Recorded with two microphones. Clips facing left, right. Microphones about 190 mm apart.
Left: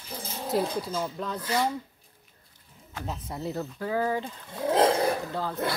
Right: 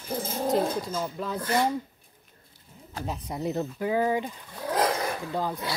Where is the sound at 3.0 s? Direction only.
15° right (ahead or behind).